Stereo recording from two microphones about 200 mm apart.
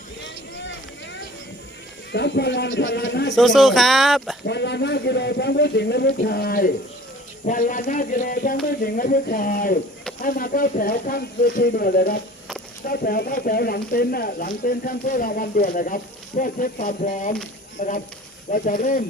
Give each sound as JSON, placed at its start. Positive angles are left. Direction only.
{"t": 0.2, "sound": "a sound", "side_deg": 65}
{"t": 2.1, "sound": "speech", "side_deg": 60}
{"t": 3.3, "sound": "speech", "side_deg": 0}
{"t": 4.4, "sound": "speech", "side_deg": 60}